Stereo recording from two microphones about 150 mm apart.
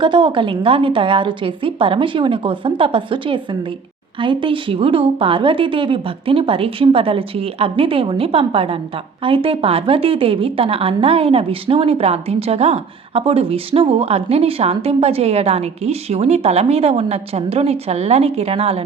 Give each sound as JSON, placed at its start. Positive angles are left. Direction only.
{"t": 0.0, "sound": "speech", "side_deg": -35}